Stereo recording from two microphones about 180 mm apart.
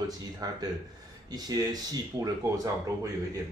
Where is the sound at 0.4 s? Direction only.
20° right (ahead or behind).